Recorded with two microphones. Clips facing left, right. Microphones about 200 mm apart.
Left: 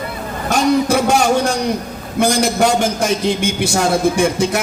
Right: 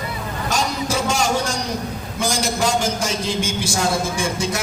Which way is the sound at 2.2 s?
60° left (ahead or behind).